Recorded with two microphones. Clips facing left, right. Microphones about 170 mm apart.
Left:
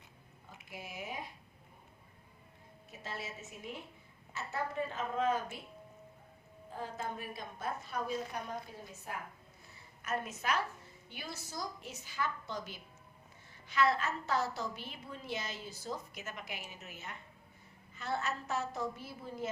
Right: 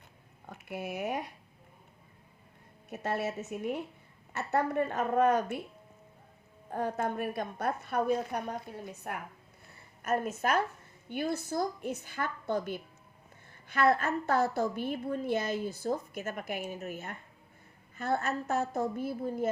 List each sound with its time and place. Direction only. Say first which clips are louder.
0.4 s speech: right 10 dB; 65° right (ahead or behind)
2.9 s a woman's voice: right 12 dB; 65° right (ahead or behind)
6.7 s a woman's voice: right 9 dB; 65° right (ahead or behind)
10.0 s a woman's voice: right 8 dB; 50° right (ahead or behind)